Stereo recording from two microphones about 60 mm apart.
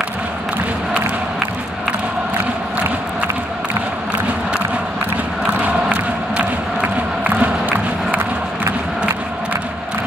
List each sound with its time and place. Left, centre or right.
5.5 s crowd: right
7.2 s music: right